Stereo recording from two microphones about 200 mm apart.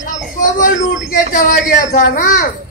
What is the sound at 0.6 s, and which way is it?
A child's voice, 45° left (ahead or behind).